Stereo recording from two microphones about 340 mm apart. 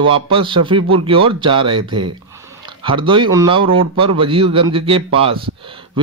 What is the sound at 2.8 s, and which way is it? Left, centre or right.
A man's voice, centre.